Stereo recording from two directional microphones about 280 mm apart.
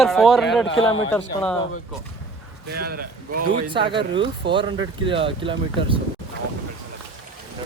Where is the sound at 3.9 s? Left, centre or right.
Centre.